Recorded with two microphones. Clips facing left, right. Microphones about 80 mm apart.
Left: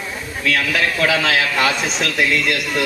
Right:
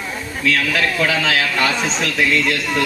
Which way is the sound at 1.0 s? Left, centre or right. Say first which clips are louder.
Left 1 dB; centre.